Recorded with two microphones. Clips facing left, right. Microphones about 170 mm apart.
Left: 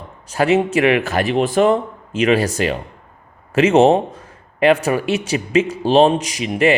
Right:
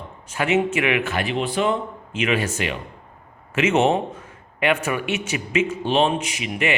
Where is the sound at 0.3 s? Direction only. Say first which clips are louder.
Left 5 dB; 35° left (ahead or behind).